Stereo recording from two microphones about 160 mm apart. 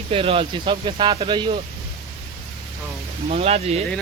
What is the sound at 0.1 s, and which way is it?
Speech, 35° right (ahead or behind).